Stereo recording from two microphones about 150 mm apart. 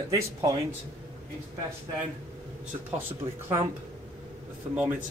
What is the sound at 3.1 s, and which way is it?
Speech, 15° right (ahead or behind).